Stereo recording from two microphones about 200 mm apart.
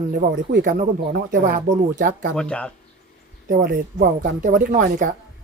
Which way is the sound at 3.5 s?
45° right (ahead or behind).